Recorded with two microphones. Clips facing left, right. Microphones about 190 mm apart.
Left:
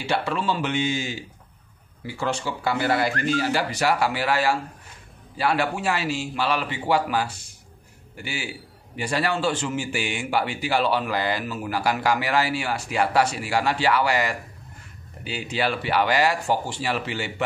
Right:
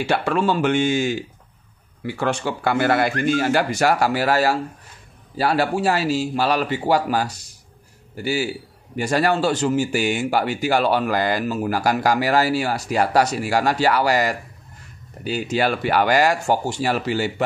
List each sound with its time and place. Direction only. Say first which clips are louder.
0.0 s speech: right 5 dB; 50° right (ahead or behind)
2.1 s speech: right 4 dB; 60° right (ahead or behind); by 17.5 s 40° right (ahead or behind)